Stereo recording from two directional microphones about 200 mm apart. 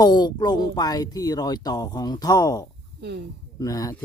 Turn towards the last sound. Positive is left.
turn(degrees=15)  # may be behind; listen again after turning